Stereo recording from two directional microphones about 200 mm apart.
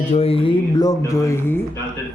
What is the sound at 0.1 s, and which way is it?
Speech, 30° left (ahead or behind).